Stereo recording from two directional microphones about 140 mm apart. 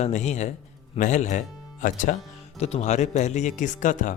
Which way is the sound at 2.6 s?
50° left (ahead or behind).